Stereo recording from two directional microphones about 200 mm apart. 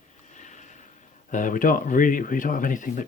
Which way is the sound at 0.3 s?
35° left (ahead or behind).